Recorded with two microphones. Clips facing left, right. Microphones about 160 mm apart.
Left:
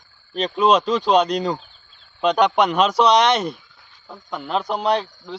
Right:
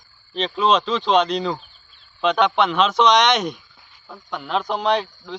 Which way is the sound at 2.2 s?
40° left (ahead or behind).